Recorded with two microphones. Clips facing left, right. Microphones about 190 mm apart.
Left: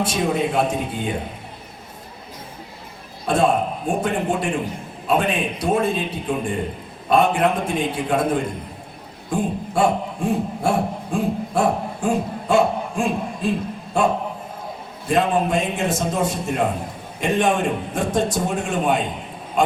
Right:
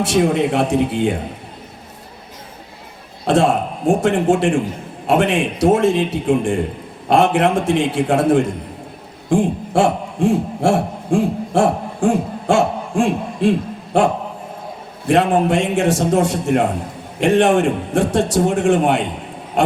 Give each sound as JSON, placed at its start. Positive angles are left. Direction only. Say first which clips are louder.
{"t": 0.0, "sound": "a man's voice", "louder": "right 5 dB", "side_deg": -80}
{"t": 3.2, "sound": "a man's voice", "louder": "right 3 dB", "side_deg": -80}
{"t": 15.0, "sound": "a man's voice", "louder": "right 4 dB", "side_deg": -80}